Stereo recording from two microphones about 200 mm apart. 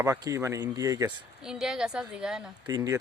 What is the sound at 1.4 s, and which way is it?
Speech, 5° right (ahead or behind).